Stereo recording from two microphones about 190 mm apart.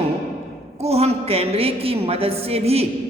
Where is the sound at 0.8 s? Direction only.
35° right (ahead or behind).